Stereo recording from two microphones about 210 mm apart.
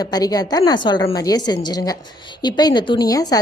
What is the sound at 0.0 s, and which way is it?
A woman's voice, 20° left (ahead or behind).